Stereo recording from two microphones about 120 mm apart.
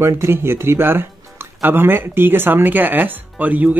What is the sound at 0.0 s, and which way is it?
Speech, 20° right (ahead or behind).